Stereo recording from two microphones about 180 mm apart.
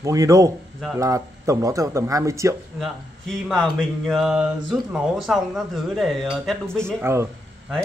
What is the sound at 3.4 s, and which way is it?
Speech, centre (ahead or behind).